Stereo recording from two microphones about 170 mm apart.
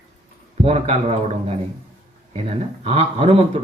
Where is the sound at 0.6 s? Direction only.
40° right (ahead or behind).